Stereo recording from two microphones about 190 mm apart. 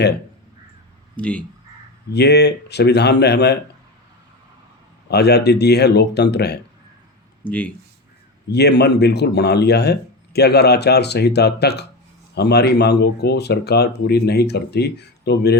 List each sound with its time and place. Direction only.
1.1 s speech: 5° left (ahead or behind)
2.1 s speech: 60° left (ahead or behind)
5.1 s speech: 60° left (ahead or behind)
7.4 s speech: 10° left (ahead or behind)
8.4 s speech: 60° left (ahead or behind)